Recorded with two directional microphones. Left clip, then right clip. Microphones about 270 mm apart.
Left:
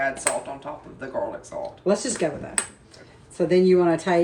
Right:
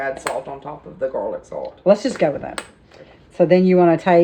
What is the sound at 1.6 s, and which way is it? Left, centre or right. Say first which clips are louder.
Speech: right 8 dB; right.